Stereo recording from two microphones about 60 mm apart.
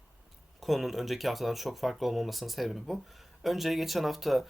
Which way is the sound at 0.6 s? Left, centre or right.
Centre.